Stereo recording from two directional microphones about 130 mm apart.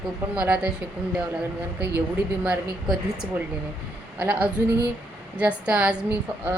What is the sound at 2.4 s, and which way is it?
A woman's voice, 5° right (ahead or behind).